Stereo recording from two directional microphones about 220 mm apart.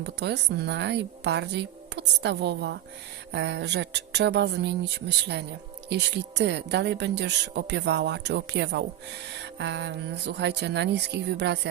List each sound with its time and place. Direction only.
0.0 s speech: 50° right (ahead or behind)